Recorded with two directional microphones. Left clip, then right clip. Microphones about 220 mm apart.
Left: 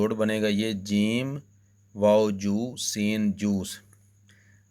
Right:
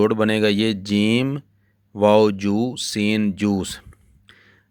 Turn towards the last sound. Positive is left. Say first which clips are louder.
# right 10 dB
turn(degrees=-40)  # may be behind; listen again after turning